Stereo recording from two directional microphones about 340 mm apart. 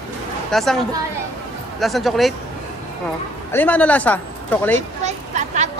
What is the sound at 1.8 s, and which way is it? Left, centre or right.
Speech, centre.